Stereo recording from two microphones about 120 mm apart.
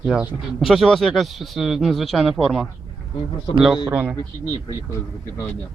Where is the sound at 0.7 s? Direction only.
Centre (ahead or behind).